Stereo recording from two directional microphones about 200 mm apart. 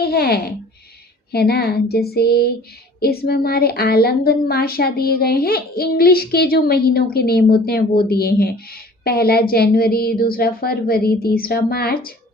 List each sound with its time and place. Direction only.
0.0 s a woman's voice: 50° left (ahead or behind)